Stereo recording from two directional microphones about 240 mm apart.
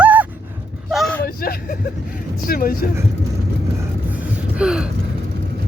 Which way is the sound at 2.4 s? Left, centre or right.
Left.